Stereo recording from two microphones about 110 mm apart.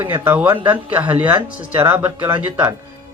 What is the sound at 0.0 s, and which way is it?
Speech, 20° right (ahead or behind).